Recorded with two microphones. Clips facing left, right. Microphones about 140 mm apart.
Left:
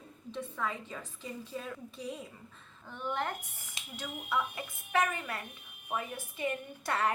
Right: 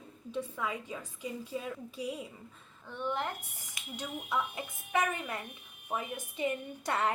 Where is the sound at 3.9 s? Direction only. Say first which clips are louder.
Even; 20° right (ahead or behind).